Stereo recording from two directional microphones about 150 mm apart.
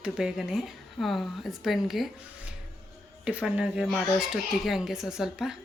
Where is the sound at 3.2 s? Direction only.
5° right (ahead or behind).